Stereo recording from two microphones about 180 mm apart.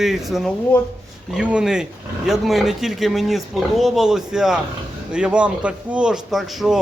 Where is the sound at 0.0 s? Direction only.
Centre (ahead or behind).